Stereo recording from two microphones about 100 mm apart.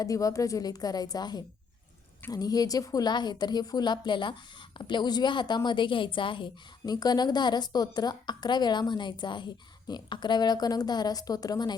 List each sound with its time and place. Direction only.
0.0 s a woman's voice: 35° left (ahead or behind)